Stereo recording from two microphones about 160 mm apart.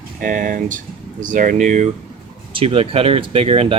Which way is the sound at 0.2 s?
60° right (ahead or behind).